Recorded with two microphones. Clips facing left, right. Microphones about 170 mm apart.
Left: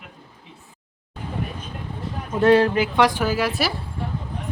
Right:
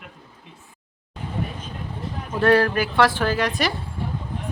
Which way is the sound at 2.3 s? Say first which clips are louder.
Left 2 dB; 20° left (ahead or behind).